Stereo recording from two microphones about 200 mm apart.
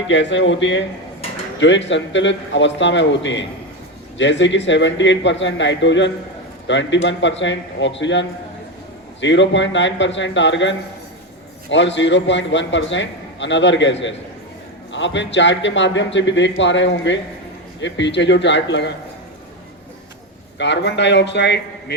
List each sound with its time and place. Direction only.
0.1 s a man's voice: 65° left (ahead or behind)
20.6 s a man's voice: 60° left (ahead or behind)